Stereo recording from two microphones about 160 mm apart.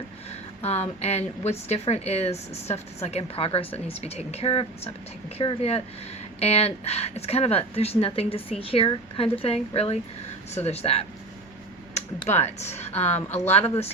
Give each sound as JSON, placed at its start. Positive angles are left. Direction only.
{"t": 0.3, "sound": "a woman's voice", "side_deg": 40}
{"t": 12.2, "sound": "a woman's voice", "side_deg": 45}